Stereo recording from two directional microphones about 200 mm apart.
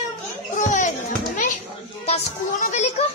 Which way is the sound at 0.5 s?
40° left (ahead or behind).